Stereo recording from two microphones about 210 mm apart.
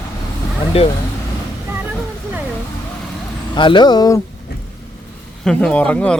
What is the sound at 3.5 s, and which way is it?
Speech, 20° left (ahead or behind).